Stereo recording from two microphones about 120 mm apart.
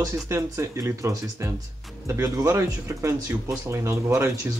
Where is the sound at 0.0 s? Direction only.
25° right (ahead or behind).